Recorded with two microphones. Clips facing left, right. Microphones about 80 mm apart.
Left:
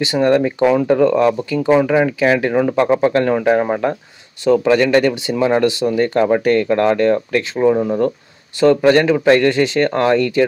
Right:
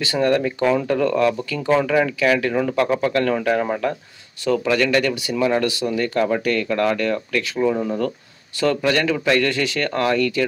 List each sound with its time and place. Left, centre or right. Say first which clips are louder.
0.0 s speech: left 5 dB; left
7.7 s speech: left 6 dB; left